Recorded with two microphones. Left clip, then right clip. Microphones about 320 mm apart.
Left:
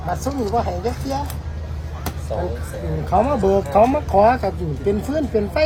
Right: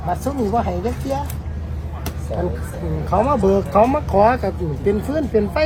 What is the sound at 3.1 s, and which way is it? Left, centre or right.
Speech, centre.